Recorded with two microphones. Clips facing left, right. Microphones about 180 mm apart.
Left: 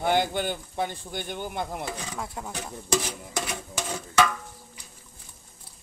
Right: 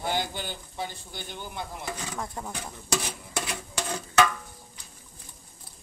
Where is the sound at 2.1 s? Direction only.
5° left (ahead or behind).